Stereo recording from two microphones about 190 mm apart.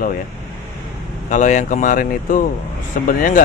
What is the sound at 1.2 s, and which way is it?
Speech, 40° left (ahead or behind).